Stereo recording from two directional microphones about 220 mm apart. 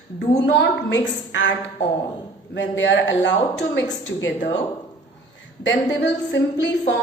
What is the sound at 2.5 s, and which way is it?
Speech, 55° left (ahead or behind).